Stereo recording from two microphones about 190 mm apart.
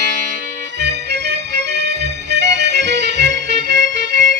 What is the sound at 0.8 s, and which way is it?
Music, 65° right (ahead or behind).